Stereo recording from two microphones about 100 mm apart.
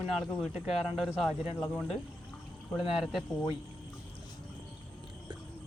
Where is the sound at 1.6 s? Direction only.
15° left (ahead or behind).